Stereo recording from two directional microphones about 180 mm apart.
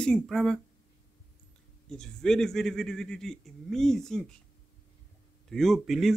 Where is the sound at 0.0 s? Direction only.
5° left (ahead or behind).